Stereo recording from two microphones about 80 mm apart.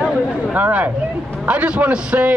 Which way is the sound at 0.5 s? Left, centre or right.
Right.